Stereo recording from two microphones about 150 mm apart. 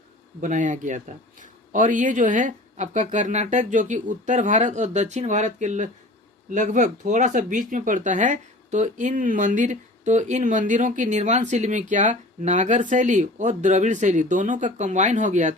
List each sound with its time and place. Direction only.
0.4 s speech: 55° right (ahead or behind)